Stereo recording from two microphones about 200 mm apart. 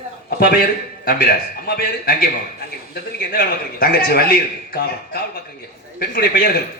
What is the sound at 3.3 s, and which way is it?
A man's voice, 50° left (ahead or behind).